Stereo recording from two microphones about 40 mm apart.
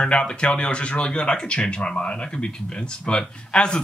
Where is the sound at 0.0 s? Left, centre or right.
Left.